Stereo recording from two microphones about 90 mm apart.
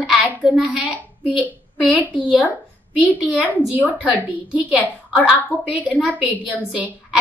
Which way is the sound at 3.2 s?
15° right (ahead or behind).